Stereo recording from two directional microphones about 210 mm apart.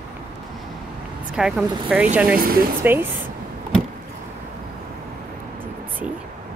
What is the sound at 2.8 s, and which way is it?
Speech, 10° right (ahead or behind).